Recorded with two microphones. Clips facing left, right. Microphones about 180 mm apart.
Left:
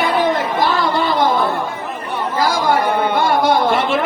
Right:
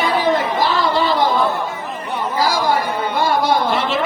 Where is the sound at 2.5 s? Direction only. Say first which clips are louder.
Left 4 dB; 60° left (ahead or behind).